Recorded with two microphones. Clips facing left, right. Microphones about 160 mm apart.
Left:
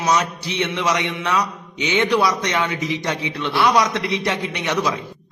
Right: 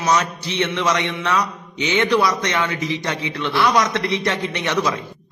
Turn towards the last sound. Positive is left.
turn(degrees=15)  # may be behind; listen again after turning